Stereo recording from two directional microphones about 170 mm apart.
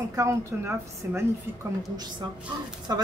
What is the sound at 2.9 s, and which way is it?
Speech, 20° right (ahead or behind).